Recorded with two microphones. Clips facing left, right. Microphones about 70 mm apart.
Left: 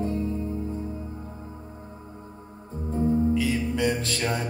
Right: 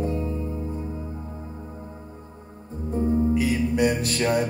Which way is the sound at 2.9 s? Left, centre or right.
Right.